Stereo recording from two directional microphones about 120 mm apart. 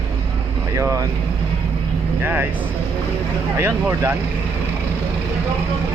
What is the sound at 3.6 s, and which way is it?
Speech, 20° right (ahead or behind).